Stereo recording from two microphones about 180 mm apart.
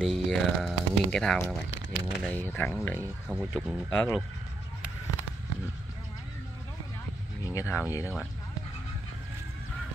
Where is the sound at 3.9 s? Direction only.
15° left (ahead or behind).